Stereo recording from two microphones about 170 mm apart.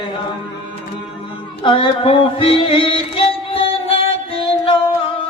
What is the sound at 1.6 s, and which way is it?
Music, 30° left (ahead or behind).